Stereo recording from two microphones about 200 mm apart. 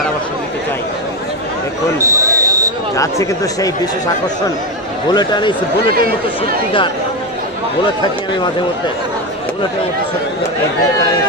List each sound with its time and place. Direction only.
2.0 s a sound: 15° right (ahead or behind)
3.0 s speech: 15° left (ahead or behind)
5.1 s a man's voice: 20° left (ahead or behind)